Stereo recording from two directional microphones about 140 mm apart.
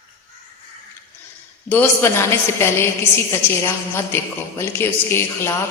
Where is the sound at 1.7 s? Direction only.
15° left (ahead or behind).